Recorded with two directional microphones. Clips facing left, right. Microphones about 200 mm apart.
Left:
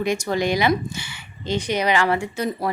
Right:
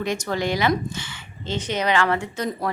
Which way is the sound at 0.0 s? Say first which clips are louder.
Left 3 dB; 10° left (ahead or behind).